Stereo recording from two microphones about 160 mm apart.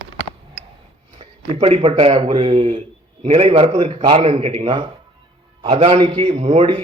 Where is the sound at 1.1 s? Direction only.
40° right (ahead or behind).